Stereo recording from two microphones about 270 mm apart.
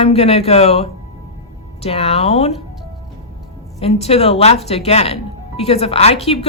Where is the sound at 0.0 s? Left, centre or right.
Left.